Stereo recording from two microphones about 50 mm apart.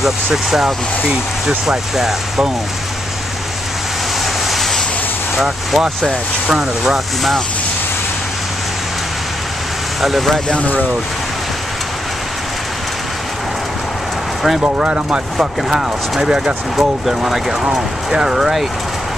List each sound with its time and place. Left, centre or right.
0.0 s speech: centre
4.5 s vehicle: centre
5.3 s speech: centre
10.0 s speech: centre
14.6 s speech: right